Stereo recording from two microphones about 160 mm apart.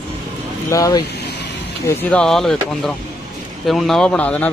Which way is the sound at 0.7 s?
20° left (ahead or behind).